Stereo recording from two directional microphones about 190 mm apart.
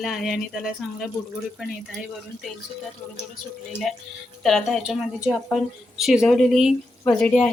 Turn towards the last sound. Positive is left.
turn(degrees=5)  # may be behind; listen again after turning